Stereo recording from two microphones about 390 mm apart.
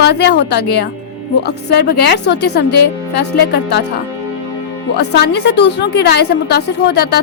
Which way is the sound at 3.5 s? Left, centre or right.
Left.